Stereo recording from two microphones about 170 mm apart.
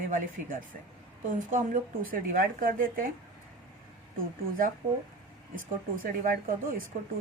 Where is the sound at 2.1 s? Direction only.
55° right (ahead or behind).